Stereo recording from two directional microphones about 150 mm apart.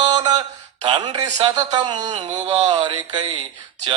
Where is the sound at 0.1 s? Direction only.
25° right (ahead or behind).